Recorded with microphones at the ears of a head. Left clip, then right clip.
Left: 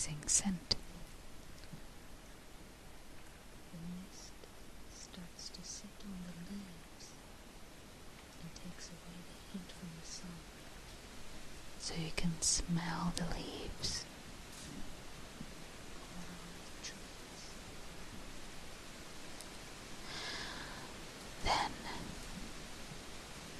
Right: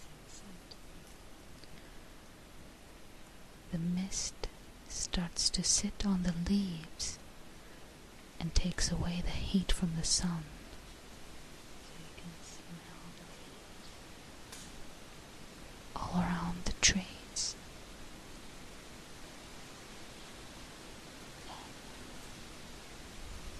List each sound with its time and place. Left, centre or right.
0.0 s speech: left
3.7 s a sound: right
4.9 s speech: right
8.4 s speech: right
11.8 s speech: left
15.9 s whispering: right
20.1 s a sound: left
21.5 s pink noise: left